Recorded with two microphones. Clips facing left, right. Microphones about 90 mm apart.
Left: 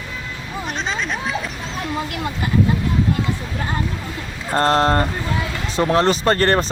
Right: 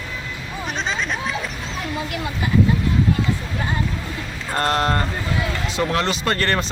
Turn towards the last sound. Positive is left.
turn(degrees=35)  # may be behind; listen again after turning